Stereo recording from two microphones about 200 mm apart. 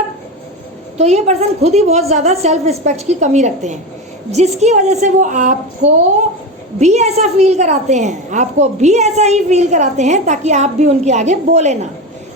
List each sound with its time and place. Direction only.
0.9 s a woman's voice: 35° right (ahead or behind)